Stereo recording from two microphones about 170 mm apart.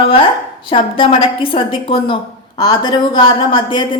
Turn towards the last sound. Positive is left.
turn(degrees=30)  # may be behind; listen again after turning